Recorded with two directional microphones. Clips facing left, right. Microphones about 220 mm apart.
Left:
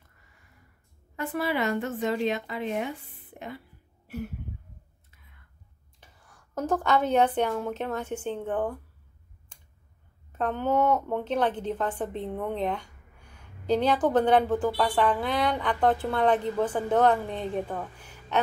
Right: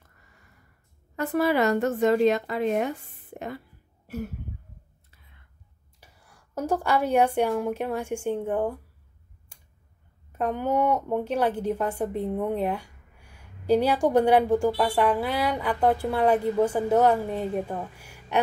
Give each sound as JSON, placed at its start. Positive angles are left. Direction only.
{"t": 1.1, "sound": "a woman's voice", "side_deg": -40}
{"t": 5.9, "sound": "a woman's voice", "side_deg": -10}
{"t": 9.5, "sound": "a sound", "side_deg": -10}
{"t": 10.3, "sound": "a woman's voice", "side_deg": -10}